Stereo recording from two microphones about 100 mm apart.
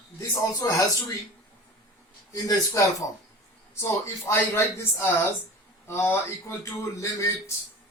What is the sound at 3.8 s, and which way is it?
Speech, 25° left (ahead or behind).